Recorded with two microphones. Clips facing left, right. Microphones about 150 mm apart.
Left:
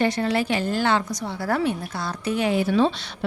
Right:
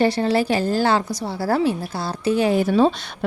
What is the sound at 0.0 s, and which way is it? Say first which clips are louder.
Speech: right 4 dB; 30° right (ahead or behind).